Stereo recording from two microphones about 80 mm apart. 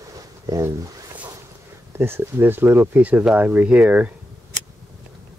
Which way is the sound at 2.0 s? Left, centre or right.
Right.